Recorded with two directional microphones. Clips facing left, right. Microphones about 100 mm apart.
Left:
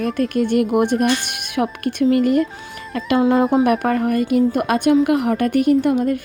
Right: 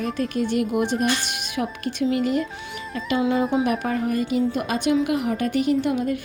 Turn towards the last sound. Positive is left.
turn(degrees=45)  # may be behind; listen again after turning